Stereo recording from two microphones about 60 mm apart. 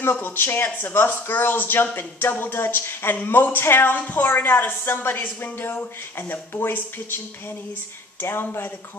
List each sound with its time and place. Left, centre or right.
0.0 s speech: left